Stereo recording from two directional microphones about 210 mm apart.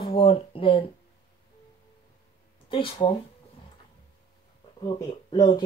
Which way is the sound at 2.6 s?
25° left (ahead or behind).